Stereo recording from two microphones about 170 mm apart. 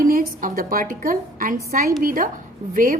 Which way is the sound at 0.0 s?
55° right (ahead or behind).